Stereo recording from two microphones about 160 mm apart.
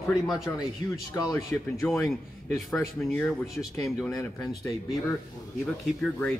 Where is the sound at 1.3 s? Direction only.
15° left (ahead or behind).